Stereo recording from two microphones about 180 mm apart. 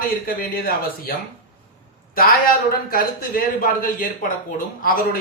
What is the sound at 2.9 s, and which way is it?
Speech, 50° left (ahead or behind).